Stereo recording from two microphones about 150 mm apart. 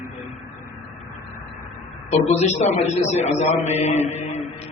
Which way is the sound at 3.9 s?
45° left (ahead or behind).